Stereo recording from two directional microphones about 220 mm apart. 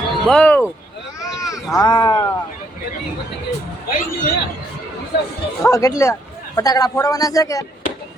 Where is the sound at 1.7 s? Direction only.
20° left (ahead or behind).